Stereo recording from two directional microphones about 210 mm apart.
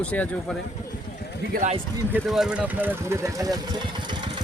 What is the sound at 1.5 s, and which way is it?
Speech, 40° right (ahead or behind).